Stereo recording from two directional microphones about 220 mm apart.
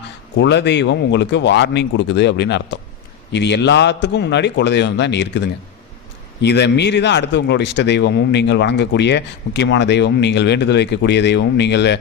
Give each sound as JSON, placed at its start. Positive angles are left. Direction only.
{"t": 0.3, "sound": "speech", "side_deg": 50}
{"t": 6.4, "sound": "speech", "side_deg": 50}